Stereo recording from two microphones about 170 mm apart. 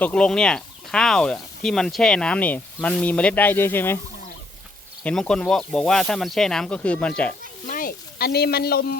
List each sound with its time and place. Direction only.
0.0 s speech: 5° left (ahead or behind)
5.0 s speech: 5° left (ahead or behind)
7.7 s a sound: 55° left (ahead or behind)